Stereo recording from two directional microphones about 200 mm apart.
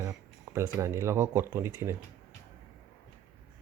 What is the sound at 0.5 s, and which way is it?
Speech, 15° right (ahead or behind).